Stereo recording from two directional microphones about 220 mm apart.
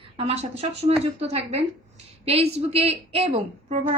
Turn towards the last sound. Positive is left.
turn(degrees=-30)  # may be behind; listen again after turning